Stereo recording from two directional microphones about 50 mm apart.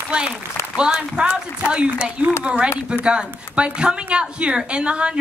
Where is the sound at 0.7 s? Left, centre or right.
Centre.